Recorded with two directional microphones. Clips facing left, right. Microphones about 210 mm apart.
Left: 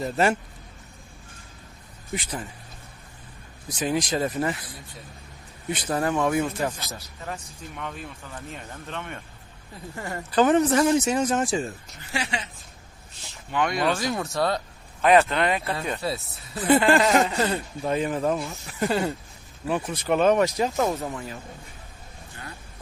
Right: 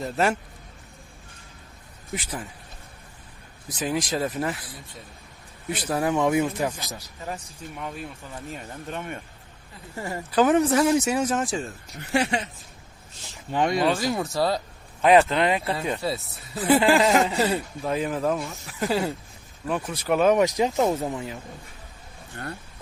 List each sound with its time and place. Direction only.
0.0 s speech: centre (ahead or behind)
2.1 s speech: 5° right (ahead or behind)
3.8 s speech: centre (ahead or behind)
6.1 s speech: 15° right (ahead or behind); by 11.7 s centre (ahead or behind)
12.1 s speech: 50° right (ahead or behind)
13.5 s speech: 30° right (ahead or behind)
13.9 s speech: centre (ahead or behind)
15.0 s speech: 20° right (ahead or behind)
16.0 s speech: centre (ahead or behind)
20.3 s speech: 15° right (ahead or behind)